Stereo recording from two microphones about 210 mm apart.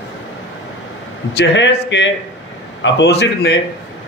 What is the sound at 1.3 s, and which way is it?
A man's voice, 60° left (ahead or behind).